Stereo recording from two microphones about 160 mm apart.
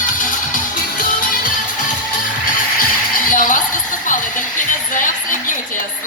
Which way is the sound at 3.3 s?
60° left (ahead or behind).